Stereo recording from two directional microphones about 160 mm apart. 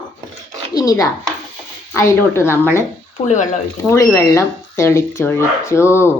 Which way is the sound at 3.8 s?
15° left (ahead or behind).